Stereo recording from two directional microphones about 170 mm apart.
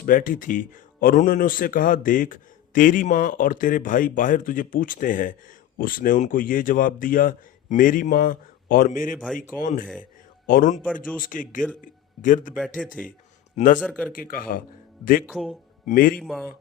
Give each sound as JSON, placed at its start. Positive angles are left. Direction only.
{"t": 0.0, "sound": "a man's voice", "side_deg": 55}
{"t": 9.2, "sound": "speech", "side_deg": 5}
{"t": 9.6, "sound": "a man's voice", "side_deg": 55}
{"t": 12.5, "sound": "speech", "side_deg": 5}
{"t": 14.1, "sound": "a man's voice", "side_deg": 55}
{"t": 15.3, "sound": "speech", "side_deg": 0}
{"t": 15.9, "sound": "a man's voice", "side_deg": 55}
{"t": 16.1, "sound": "speech", "side_deg": 0}